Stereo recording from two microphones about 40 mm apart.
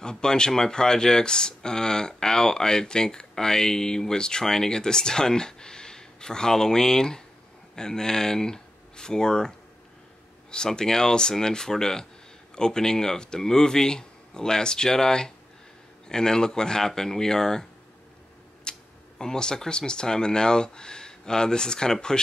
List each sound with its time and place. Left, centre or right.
0.0 s speech: centre
10.5 s speech: centre